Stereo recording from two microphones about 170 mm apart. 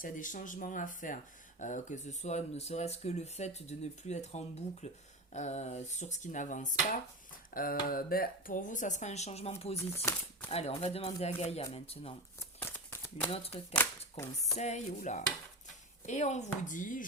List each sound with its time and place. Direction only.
0.0 s speech: 50° left (ahead or behind)
9.9 s speech: 15° left (ahead or behind)
10.5 s speech: 35° left (ahead or behind)
12.4 s crumpling: 15° left (ahead or behind)
13.3 s speech: 35° left (ahead or behind)